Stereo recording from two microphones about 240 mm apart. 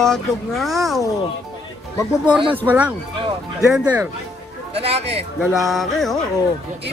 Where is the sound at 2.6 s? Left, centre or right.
Centre.